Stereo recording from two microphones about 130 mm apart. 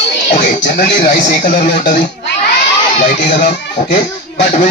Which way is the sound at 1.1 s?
75° left (ahead or behind).